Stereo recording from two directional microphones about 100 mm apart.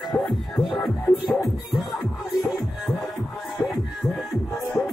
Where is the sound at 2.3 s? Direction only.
Centre (ahead or behind).